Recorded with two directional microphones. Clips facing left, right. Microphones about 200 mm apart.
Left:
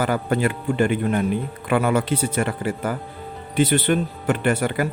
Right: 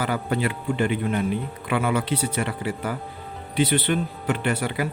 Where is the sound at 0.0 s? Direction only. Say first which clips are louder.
Left 4 dB; 45° left (ahead or behind).